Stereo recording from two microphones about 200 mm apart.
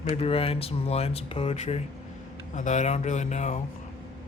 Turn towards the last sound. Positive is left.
turn(degrees=35)  # may be behind; listen again after turning